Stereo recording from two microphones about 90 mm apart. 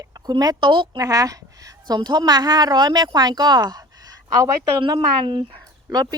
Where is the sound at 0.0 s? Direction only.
45° right (ahead or behind).